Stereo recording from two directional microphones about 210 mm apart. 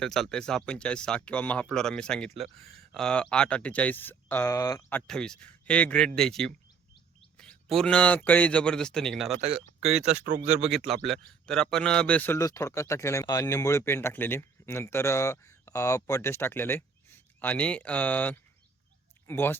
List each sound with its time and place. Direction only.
0.0 s speech: centre (ahead or behind)
9.3 s speech: 30° right (ahead or behind)
10.6 s a man's voice: centre (ahead or behind)